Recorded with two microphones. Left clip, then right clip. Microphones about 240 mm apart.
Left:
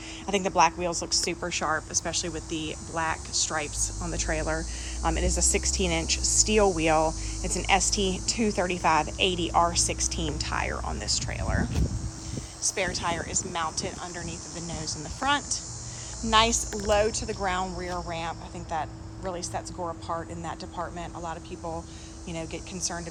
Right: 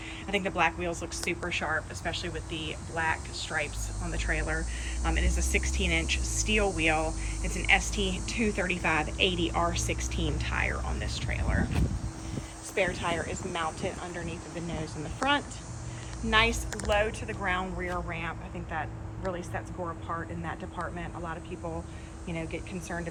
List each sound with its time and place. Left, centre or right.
0.3 s speech: centre